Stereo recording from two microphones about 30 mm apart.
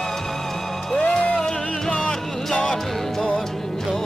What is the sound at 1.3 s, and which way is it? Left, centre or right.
Music, left.